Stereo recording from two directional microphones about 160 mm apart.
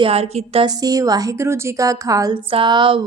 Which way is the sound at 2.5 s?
30° right (ahead or behind).